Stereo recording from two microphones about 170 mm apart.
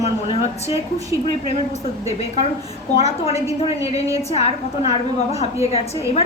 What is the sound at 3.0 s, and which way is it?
A woman's voice, 35° left (ahead or behind).